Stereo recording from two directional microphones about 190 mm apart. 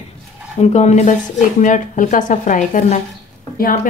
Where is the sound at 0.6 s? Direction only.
35° left (ahead or behind).